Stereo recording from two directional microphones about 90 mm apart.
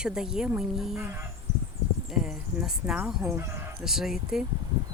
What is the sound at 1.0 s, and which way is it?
Speech, 30° right (ahead or behind).